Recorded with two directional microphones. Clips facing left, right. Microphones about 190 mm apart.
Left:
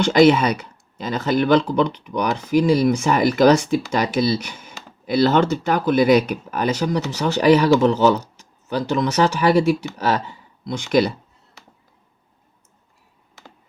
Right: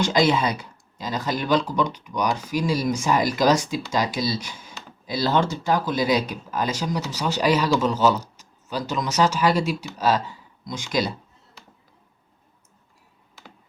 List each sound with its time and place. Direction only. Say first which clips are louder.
0.0 s speech: left 6 dB; 60° left (ahead or behind)